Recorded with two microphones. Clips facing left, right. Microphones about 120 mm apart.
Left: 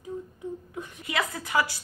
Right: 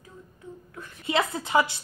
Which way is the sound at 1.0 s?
25° right (ahead or behind).